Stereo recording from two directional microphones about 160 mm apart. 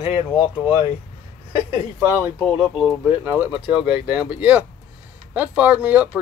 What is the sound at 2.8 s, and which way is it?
Speech, 10° right (ahead or behind).